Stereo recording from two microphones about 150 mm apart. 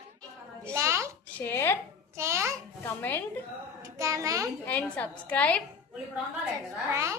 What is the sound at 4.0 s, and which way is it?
Speech, 20° right (ahead or behind).